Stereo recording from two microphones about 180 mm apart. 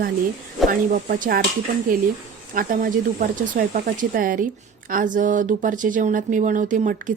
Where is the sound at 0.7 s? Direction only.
50° right (ahead or behind).